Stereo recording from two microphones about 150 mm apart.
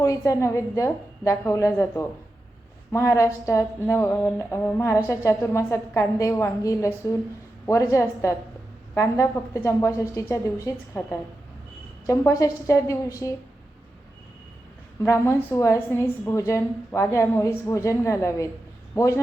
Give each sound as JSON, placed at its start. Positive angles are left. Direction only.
{"t": 0.0, "sound": "a woman's voice", "side_deg": 20}
{"t": 3.8, "sound": "a sound", "side_deg": 15}
{"t": 5.0, "sound": "a woman's voice", "side_deg": 20}
{"t": 15.0, "sound": "a woman's voice", "side_deg": 15}